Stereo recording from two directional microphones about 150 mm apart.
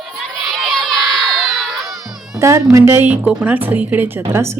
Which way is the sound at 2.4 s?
20° right (ahead or behind).